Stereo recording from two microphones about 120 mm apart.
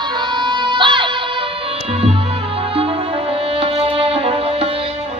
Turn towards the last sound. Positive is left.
turn(degrees=-55)  # may be behind; listen again after turning